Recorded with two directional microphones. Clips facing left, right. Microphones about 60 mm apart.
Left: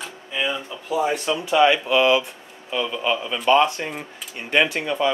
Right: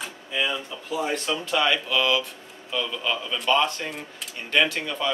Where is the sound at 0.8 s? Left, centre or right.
Centre.